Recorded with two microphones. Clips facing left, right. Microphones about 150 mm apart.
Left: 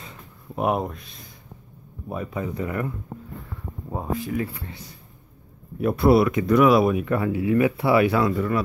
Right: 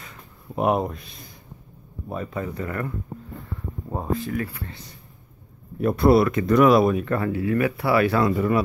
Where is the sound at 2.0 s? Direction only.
10° left (ahead or behind).